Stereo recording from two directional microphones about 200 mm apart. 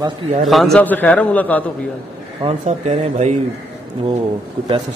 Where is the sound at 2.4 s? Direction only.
30° right (ahead or behind).